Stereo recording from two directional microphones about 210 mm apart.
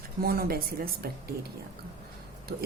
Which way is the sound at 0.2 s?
45° right (ahead or behind).